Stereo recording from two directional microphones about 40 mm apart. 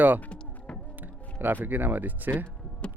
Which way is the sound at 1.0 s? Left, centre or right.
Right.